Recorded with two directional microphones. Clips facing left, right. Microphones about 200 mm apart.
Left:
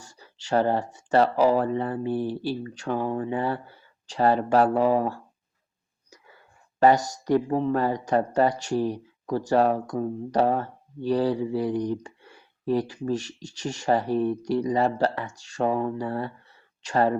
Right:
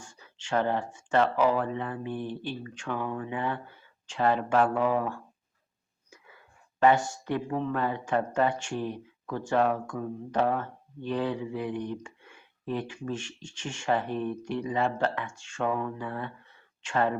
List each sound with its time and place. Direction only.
0.0 s speech: 40° left (ahead or behind)